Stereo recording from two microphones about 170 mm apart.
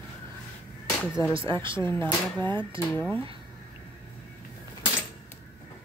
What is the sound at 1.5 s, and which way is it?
Speech, 30° right (ahead or behind).